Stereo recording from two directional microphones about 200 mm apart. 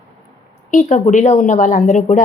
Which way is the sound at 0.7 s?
40° left (ahead or behind).